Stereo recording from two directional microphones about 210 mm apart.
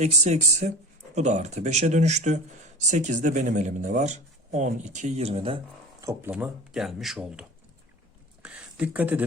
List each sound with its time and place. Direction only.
0.0 s speech: 35° right (ahead or behind)
6.0 s speech: 15° right (ahead or behind)
6.3 s speech: 5° right (ahead or behind)
8.4 s a sound: 5° right (ahead or behind)